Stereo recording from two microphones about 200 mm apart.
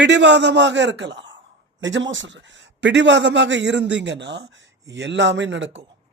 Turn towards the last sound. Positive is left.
turn(degrees=-65)  # may be behind; listen again after turning